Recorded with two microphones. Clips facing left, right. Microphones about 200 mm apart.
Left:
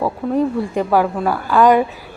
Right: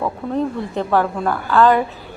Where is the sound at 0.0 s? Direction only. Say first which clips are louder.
Left 3 dB; 10° left (ahead or behind).